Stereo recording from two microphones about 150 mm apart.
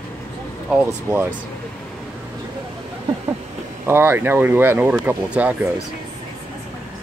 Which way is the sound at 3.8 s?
15° right (ahead or behind).